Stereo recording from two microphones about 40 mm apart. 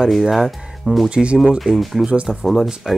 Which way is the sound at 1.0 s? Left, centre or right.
Right.